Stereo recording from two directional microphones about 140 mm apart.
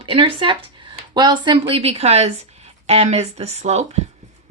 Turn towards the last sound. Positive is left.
turn(degrees=-50)  # may be behind; listen again after turning